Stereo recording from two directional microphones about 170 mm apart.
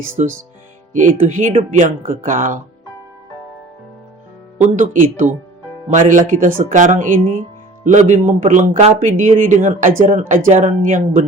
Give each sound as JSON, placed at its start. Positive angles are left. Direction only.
{"t": 0.0, "sound": "a man's voice", "side_deg": -50}
{"t": 1.5, "sound": "a man's voice", "side_deg": -45}
{"t": 4.5, "sound": "a man's voice", "side_deg": -45}